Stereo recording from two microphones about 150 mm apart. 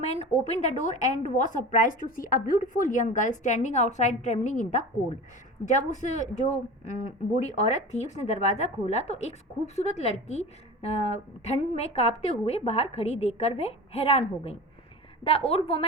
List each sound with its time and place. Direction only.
0.0 s a woman's voice: 45° left (ahead or behind)